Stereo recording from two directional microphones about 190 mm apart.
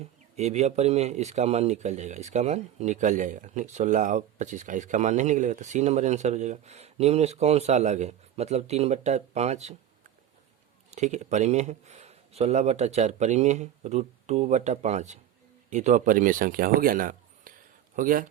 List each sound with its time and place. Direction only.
0.0 s speech: 35° right (ahead or behind)
10.9 s speech: 40° right (ahead or behind)